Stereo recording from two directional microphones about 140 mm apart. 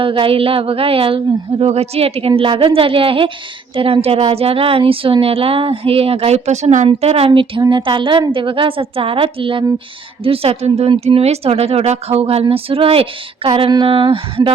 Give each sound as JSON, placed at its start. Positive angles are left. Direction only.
{"t": 0.0, "sound": "a woman's voice", "side_deg": -40}